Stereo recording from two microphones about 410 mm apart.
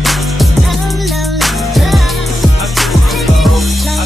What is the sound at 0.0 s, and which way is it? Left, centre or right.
Music, centre.